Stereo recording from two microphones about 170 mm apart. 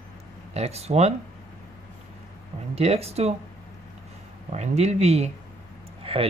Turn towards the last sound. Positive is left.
turn(degrees=-35)  # may be behind; listen again after turning